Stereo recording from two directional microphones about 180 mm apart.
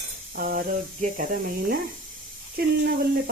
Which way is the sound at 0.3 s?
50° right (ahead or behind).